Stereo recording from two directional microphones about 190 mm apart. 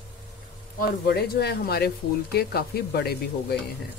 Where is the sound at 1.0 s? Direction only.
55° left (ahead or behind).